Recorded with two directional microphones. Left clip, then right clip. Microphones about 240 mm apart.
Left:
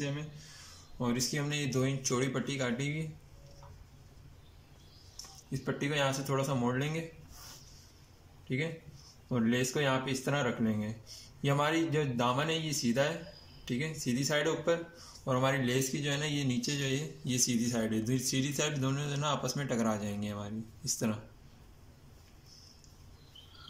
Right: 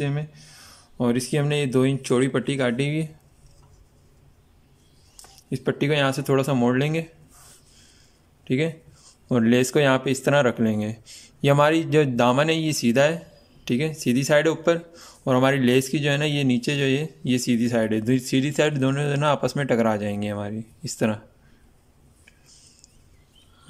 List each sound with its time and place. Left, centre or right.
0.9 s speech: right
5.5 s speech: right
9.3 s speech: right